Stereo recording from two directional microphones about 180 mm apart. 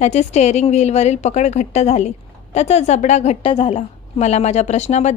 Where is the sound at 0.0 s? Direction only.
40° left (ahead or behind).